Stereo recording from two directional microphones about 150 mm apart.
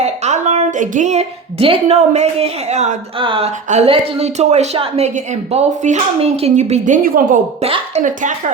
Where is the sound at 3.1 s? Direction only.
35° right (ahead or behind).